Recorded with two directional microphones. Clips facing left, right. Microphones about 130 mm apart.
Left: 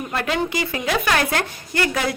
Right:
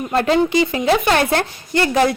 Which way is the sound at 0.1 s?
30° right (ahead or behind).